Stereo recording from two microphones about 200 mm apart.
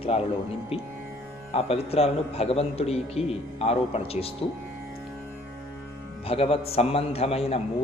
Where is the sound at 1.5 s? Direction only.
30° left (ahead or behind).